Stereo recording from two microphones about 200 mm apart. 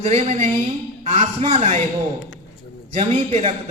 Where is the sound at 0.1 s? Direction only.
35° right (ahead or behind).